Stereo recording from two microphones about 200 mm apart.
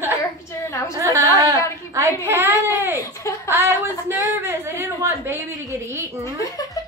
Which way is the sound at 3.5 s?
10° right (ahead or behind).